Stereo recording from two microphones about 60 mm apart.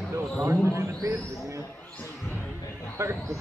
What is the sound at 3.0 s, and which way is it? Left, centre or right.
Speech, right.